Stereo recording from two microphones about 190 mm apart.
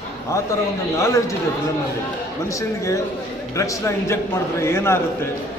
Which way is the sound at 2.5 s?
15° left (ahead or behind).